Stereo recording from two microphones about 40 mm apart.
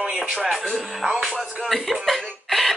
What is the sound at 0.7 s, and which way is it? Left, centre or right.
Music, centre.